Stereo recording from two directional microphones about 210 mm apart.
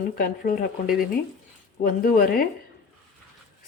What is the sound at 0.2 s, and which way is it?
Speech, 45° left (ahead or behind).